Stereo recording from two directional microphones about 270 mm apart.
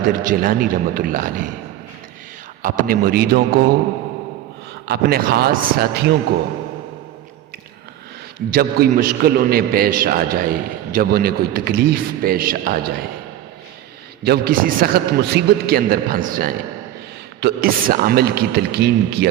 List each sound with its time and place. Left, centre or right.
0.3 s a man's voice: right
2.6 s a man's voice: right
4.9 s a man's voice: right
8.4 s a man's voice: right
14.3 s a man's voice: right